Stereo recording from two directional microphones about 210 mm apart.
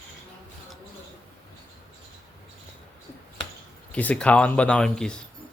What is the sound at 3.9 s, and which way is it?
Speech, 5° left (ahead or behind).